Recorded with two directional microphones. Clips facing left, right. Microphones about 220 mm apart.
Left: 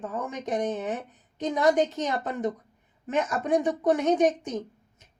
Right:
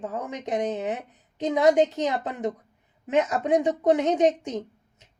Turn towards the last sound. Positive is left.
turn(degrees=-20)  # may be behind; listen again after turning